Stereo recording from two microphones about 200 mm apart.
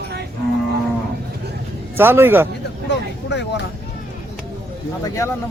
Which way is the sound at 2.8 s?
60° left (ahead or behind).